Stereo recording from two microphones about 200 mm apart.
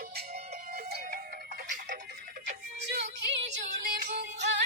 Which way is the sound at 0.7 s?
45° right (ahead or behind).